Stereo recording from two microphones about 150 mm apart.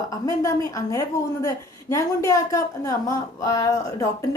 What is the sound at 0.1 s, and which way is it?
A woman's voice, 20° left (ahead or behind).